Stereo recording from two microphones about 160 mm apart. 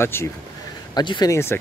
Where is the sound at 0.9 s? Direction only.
25° left (ahead or behind).